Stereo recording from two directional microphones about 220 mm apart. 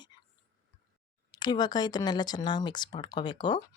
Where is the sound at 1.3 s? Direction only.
20° left (ahead or behind).